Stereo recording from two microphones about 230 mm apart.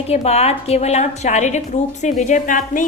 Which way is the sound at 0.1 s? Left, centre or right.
Left.